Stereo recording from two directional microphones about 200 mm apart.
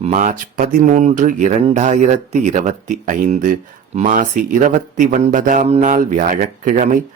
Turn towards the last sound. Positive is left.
turn(degrees=-40)  # may be behind; listen again after turning